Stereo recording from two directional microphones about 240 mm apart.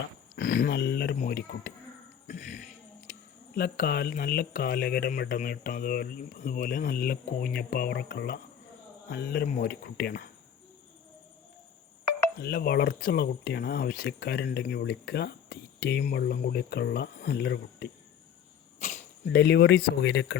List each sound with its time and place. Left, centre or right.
0.3 s speech: left
2.2 s a sound: left
3.1 s speech: left
12.4 s speech: left
18.8 s arrow: left
19.2 s speech: left